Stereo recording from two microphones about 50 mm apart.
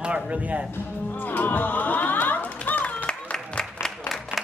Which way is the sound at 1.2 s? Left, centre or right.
Left.